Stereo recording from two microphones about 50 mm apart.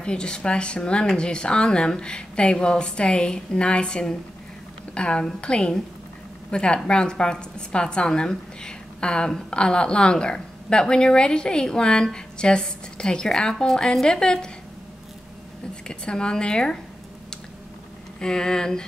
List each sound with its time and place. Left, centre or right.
0.0 s a woman's voice: centre
15.9 s a woman's voice: centre
18.2 s a woman's voice: centre